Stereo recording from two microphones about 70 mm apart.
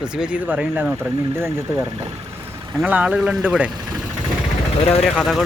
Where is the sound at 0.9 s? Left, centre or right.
Right.